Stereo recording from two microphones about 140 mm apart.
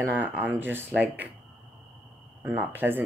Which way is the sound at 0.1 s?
15° right (ahead or behind).